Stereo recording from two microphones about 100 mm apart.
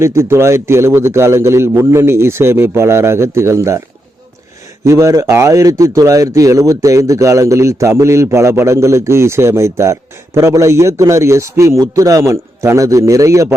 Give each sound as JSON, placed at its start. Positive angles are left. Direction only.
{"t": 0.0, "sound": "a man's voice", "side_deg": -25}
{"t": 4.9, "sound": "speech", "side_deg": -30}